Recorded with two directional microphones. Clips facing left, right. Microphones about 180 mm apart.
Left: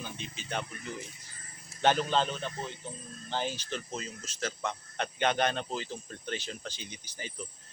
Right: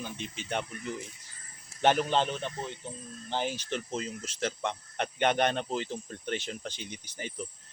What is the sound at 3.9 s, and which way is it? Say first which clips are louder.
Speech: right 4 dB; 25° right (ahead or behind).